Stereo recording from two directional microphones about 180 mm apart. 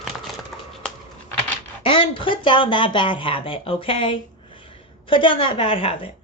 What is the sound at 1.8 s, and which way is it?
Speech, 30° left (ahead or behind).